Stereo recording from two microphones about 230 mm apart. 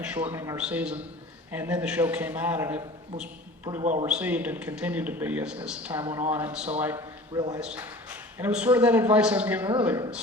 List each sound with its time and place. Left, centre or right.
0.0 s a man's voice: centre
7.3 s a man's voice: centre
7.6 s a man's voice: centre